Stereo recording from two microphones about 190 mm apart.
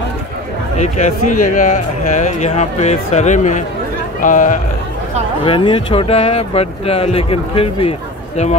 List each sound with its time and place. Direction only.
1.4 s speech: 45° left (ahead or behind)
5.4 s speech: 25° left (ahead or behind)